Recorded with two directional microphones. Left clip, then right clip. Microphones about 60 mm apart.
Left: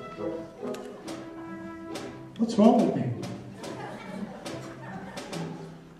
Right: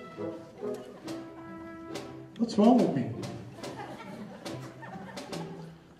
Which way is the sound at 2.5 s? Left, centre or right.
Left.